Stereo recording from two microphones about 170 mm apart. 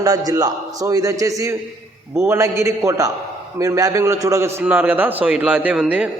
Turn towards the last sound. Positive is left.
turn(degrees=-5)  # may be behind; listen again after turning